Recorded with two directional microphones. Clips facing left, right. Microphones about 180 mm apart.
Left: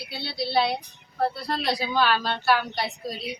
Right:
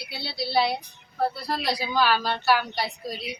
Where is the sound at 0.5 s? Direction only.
Centre (ahead or behind).